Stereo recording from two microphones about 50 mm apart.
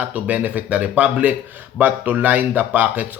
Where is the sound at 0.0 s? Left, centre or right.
Right.